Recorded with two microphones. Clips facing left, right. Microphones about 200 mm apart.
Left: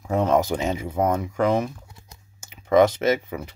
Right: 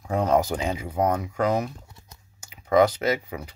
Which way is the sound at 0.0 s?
25° left (ahead or behind).